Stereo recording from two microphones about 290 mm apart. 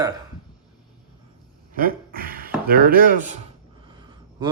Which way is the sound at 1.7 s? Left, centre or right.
Right.